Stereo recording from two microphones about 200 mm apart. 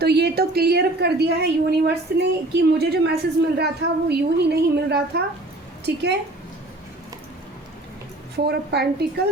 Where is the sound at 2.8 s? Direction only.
55° right (ahead or behind).